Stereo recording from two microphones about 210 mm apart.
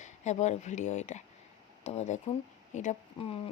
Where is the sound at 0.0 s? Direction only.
35° left (ahead or behind).